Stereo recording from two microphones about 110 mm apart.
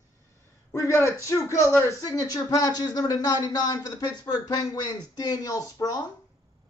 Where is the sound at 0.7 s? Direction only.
25° left (ahead or behind).